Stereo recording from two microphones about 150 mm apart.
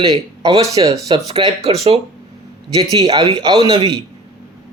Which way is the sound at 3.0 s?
35° right (ahead or behind).